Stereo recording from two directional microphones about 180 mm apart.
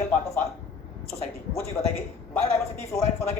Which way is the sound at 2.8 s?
15° left (ahead or behind).